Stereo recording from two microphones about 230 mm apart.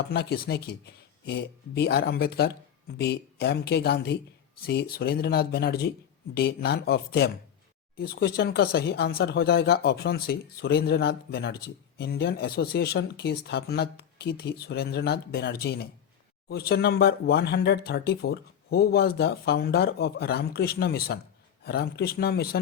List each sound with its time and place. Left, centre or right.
0.1 s speech: left